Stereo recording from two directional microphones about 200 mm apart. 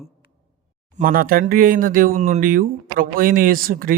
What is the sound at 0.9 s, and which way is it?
A man's voice, 45° right (ahead or behind).